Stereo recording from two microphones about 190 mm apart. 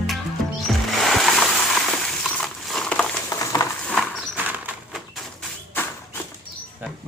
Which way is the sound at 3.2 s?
20° left (ahead or behind).